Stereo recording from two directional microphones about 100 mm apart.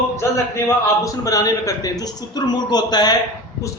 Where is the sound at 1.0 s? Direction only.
35° left (ahead or behind).